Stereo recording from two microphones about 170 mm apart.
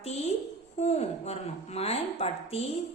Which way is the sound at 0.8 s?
40° left (ahead or behind).